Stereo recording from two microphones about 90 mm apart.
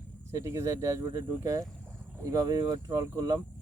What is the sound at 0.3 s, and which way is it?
Speech, 35° right (ahead or behind).